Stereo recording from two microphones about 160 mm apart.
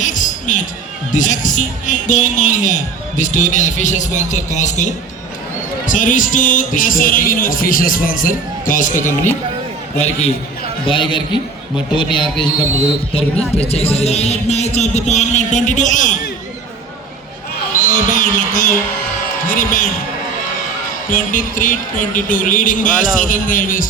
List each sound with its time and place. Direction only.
0.0 s music: 50° left (ahead or behind)
1.1 s a man's voice: 50° left (ahead or behind)
10.0 s a man's voice: 40° left (ahead or behind)
10.8 s a man's voice: 30° left (ahead or behind)
13.6 s speech: 40° left (ahead or behind)
17.8 s a sound: 55° left (ahead or behind)
19.5 s a man's voice: 60° left (ahead or behind)
21.1 s a man's voice: 60° left (ahead or behind)